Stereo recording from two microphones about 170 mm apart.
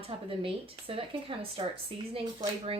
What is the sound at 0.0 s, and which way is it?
Speech, 30° right (ahead or behind).